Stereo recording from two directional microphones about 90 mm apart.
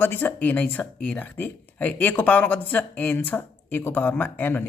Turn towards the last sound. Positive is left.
turn(degrees=20)  # may be behind; listen again after turning